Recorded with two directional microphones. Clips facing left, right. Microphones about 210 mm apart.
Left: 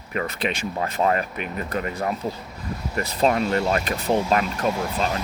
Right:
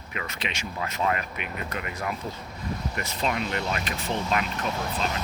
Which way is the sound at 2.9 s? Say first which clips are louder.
Left 10 dB; 40° left (ahead or behind).